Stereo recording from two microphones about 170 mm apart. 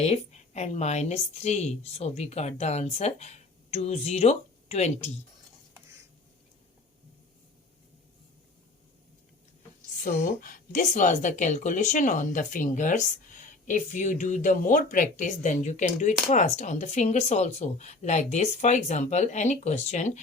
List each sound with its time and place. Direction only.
0.0 s a woman's voice: 40° left (ahead or behind)
10.0 s speech: 60° left (ahead or behind)